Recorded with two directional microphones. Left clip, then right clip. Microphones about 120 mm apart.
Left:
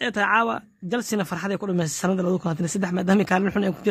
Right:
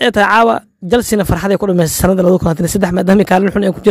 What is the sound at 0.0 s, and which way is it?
Speech, 90° right.